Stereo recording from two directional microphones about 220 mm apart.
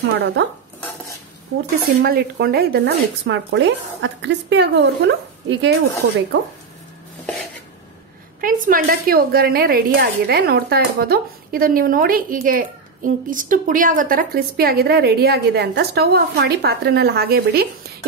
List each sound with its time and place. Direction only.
2.0 s a woman's voice: 50° right (ahead or behind)
8.4 s a woman's voice: 40° right (ahead or behind)